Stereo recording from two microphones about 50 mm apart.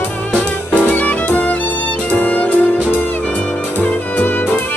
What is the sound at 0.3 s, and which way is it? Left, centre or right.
Music, left.